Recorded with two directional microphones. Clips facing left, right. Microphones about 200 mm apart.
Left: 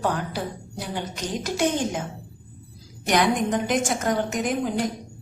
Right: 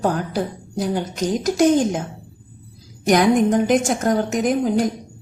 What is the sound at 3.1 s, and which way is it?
A woman's voice, 45° right (ahead or behind).